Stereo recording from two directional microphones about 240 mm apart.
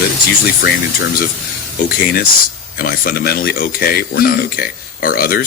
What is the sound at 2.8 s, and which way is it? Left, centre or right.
Speech, left.